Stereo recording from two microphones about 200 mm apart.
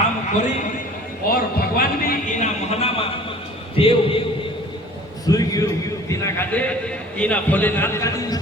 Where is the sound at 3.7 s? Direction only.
25° left (ahead or behind).